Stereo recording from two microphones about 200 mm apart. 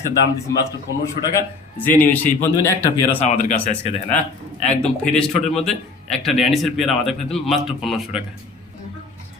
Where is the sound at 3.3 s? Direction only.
35° left (ahead or behind).